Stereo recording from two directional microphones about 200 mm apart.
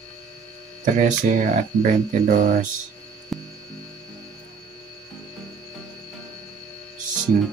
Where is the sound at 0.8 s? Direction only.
40° right (ahead or behind).